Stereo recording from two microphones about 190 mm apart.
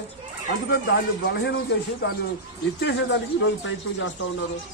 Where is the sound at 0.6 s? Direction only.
70° left (ahead or behind).